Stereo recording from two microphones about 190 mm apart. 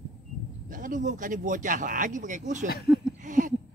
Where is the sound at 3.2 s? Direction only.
45° right (ahead or behind).